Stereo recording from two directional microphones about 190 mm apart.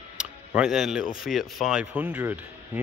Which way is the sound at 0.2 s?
5° right (ahead or behind).